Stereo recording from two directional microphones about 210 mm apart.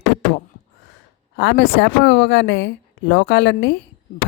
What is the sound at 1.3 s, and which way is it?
A woman's voice, 55° left (ahead or behind).